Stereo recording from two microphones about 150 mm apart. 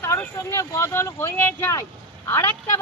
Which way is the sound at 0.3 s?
20° left (ahead or behind).